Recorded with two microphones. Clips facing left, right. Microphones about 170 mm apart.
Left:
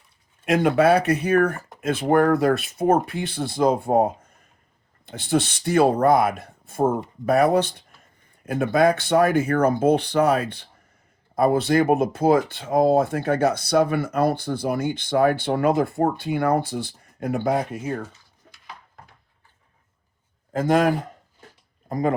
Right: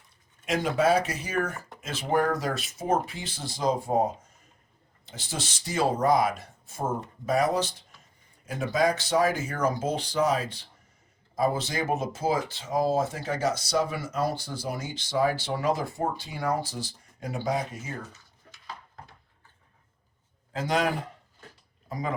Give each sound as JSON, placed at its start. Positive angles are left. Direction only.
{"t": 0.4, "sound": "speech", "side_deg": 60}
{"t": 20.5, "sound": "a man's voice", "side_deg": 50}